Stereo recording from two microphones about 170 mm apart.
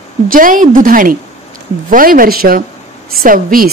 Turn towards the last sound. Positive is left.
turn(degrees=-55)  # may be behind; listen again after turning